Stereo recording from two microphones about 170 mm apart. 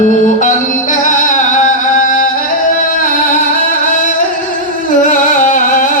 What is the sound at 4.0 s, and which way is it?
Music, 50° left (ahead or behind).